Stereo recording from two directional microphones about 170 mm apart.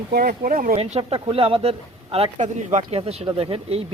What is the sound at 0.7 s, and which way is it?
Speech, 35° right (ahead or behind).